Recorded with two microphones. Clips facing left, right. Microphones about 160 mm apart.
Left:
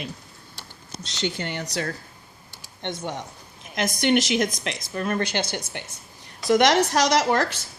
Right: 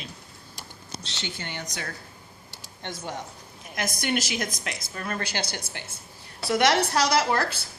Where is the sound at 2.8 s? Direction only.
20° left (ahead or behind).